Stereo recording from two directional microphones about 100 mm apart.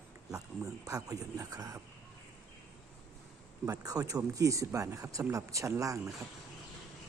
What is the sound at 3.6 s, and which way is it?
Speech, 40° right (ahead or behind).